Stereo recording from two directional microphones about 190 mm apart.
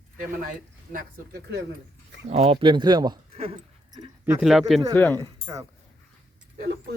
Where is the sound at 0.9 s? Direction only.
55° right (ahead or behind).